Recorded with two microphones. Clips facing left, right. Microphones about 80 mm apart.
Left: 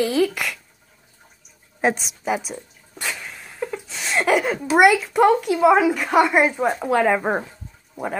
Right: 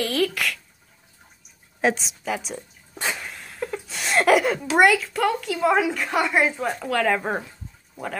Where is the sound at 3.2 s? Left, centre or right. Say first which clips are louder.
Left 2 dB; centre.